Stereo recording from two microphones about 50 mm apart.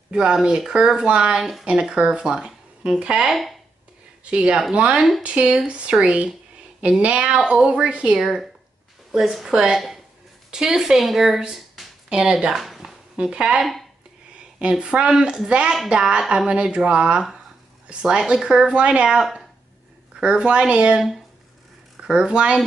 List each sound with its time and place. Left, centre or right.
0.1 s speech: centre
3.3 s speech: centre
4.2 s speech: centre
4.9 s speech: centre
5.2 s speech: right
8.2 s a woman's voice: centre
12.1 s speech: centre
12.5 s a sound: centre
13.1 s speech: centre
13.6 s speech: centre
14.6 s speech: centre
22.0 s speech: centre